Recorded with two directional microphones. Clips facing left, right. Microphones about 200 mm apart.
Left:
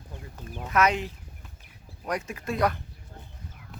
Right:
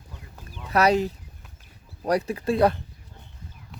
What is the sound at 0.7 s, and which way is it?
Speech, 35° right (ahead or behind).